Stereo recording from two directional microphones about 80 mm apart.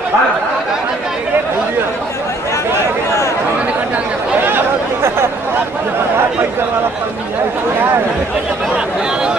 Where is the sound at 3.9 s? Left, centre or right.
Right.